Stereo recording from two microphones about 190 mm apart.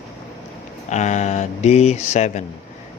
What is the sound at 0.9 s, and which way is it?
Speech, 40° left (ahead or behind).